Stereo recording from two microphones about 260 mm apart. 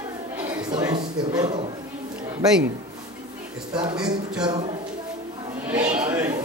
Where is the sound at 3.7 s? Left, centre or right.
Centre.